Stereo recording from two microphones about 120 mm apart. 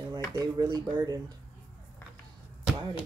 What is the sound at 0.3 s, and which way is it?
Speech, 30° right (ahead or behind).